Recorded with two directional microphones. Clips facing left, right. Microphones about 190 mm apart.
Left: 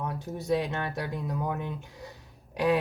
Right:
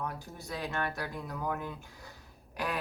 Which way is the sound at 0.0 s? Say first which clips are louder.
Left 5 dB; 20° left (ahead or behind).